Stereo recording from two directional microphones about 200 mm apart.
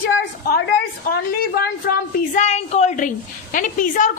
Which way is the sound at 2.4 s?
35° left (ahead or behind).